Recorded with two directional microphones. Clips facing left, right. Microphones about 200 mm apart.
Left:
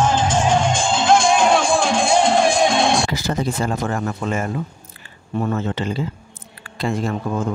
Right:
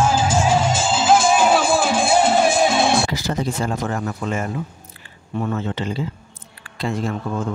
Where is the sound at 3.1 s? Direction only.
55° left (ahead or behind).